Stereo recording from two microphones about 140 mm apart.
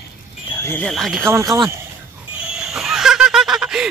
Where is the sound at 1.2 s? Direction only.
20° right (ahead or behind).